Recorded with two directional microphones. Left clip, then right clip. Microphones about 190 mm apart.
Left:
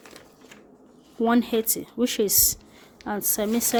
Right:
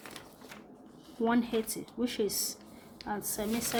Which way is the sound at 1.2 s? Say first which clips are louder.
Left 8 dB; 55° left (ahead or behind).